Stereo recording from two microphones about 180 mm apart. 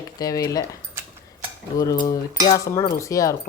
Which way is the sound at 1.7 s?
20° left (ahead or behind).